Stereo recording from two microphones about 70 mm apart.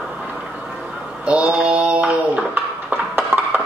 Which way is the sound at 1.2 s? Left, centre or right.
Centre.